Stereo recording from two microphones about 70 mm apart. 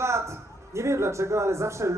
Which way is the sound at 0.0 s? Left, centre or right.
Right.